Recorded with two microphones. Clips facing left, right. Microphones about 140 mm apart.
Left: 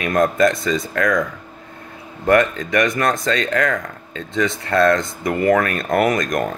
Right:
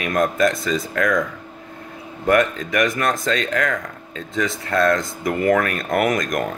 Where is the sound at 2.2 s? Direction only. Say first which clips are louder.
Left 2 dB; 5° right (ahead or behind).